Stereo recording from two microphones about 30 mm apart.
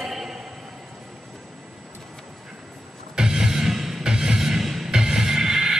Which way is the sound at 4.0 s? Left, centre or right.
Right.